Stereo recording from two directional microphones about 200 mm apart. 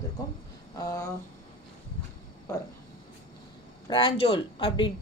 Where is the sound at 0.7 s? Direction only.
15° left (ahead or behind).